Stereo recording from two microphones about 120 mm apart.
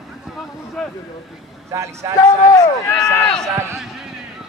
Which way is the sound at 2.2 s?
35° left (ahead or behind).